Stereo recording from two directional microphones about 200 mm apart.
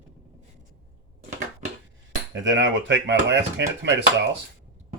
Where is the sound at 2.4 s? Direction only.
65° right (ahead or behind).